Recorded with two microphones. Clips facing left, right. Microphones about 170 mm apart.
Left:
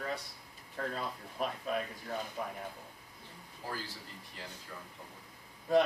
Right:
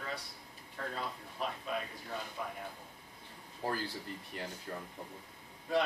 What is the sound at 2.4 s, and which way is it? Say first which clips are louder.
Speech: even; 35° left (ahead or behind).